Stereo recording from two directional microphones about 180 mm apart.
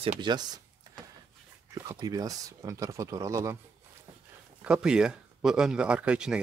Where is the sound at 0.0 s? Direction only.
30° right (ahead or behind).